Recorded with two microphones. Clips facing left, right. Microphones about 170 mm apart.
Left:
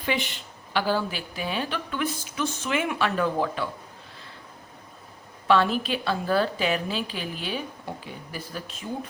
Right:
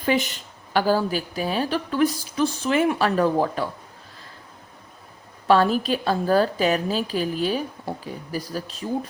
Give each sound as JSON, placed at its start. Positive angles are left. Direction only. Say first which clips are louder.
{"t": 0.0, "sound": "speech", "louder": "right 6 dB", "side_deg": -40}
{"t": 5.5, "sound": "speech", "louder": "right 3 dB", "side_deg": -40}